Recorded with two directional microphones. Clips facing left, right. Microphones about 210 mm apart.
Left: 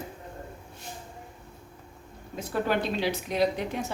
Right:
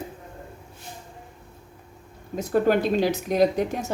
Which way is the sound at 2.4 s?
45° right (ahead or behind).